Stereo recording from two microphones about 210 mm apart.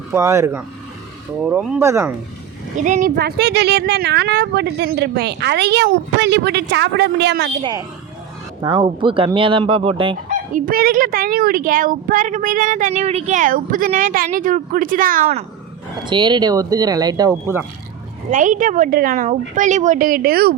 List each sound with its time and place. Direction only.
0.1 s speech: 15° right (ahead or behind)
2.7 s a woman's voice: 35° right (ahead or behind)
3.2 s a woman's voice: 50° right (ahead or behind)
8.6 s speech: 25° right (ahead or behind)
10.5 s a woman's voice: 45° right (ahead or behind)
16.0 s speech: 20° right (ahead or behind)
18.3 s a woman's voice: 40° right (ahead or behind)